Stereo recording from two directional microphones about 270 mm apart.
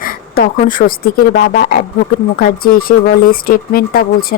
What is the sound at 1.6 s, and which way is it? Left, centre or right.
Speech, left.